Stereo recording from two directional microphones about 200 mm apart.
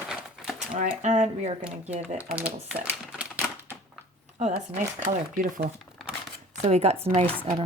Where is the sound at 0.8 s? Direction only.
40° right (ahead or behind).